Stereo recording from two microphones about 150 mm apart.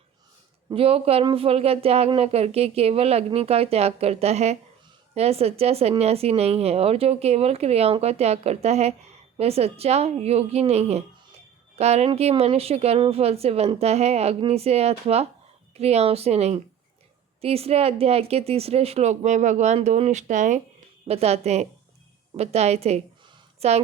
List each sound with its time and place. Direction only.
0.7 s speech: 40° right (ahead or behind); by 20.6 s 55° right (ahead or behind)
21.1 s a woman's voice: 45° right (ahead or behind)